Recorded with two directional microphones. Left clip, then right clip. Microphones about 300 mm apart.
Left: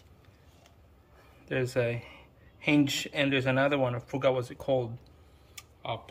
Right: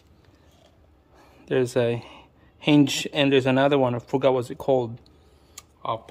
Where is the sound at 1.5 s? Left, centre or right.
Right.